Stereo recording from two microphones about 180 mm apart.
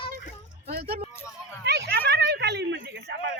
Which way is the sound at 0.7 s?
55° right (ahead or behind).